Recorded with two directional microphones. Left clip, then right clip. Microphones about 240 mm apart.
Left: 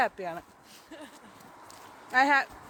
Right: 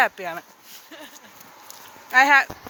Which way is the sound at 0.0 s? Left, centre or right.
Centre.